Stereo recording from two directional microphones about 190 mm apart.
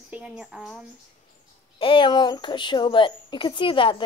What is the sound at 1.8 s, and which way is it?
A woman's voice, 25° left (ahead or behind).